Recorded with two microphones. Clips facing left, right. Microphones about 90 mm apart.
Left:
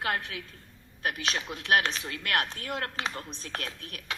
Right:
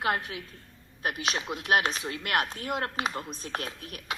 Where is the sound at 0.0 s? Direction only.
20° right (ahead or behind).